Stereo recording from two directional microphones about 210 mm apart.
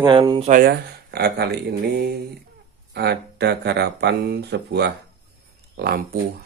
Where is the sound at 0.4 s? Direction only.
40° right (ahead or behind).